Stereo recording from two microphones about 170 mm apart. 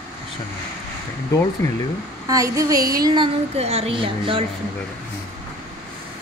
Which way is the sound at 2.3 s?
20° right (ahead or behind).